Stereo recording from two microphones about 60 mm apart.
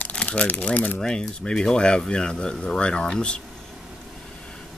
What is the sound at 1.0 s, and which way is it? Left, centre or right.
Speech, centre.